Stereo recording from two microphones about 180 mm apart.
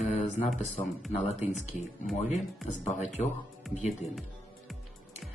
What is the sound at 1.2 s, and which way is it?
Speech, 40° left (ahead or behind).